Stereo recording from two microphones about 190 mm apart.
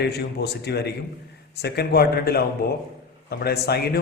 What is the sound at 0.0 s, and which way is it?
A man's voice, 60° left (ahead or behind).